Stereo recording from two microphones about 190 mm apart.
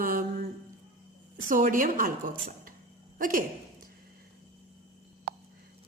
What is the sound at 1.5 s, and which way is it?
A woman's voice, 45° right (ahead or behind).